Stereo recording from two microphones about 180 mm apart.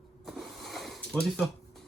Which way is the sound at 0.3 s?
Centre (ahead or behind).